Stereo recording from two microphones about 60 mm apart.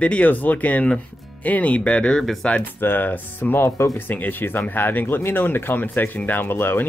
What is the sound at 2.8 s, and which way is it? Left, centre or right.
Speech, left.